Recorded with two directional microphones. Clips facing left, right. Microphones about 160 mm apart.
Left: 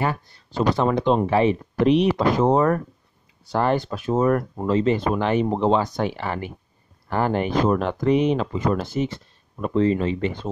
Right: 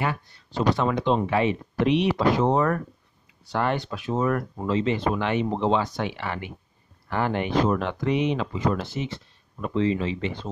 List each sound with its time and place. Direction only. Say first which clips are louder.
0.0 s speech: left 3 dB; 40° left (ahead or behind)